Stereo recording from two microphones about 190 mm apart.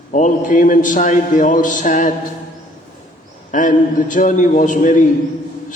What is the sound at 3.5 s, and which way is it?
A man's voice, 45° left (ahead or behind).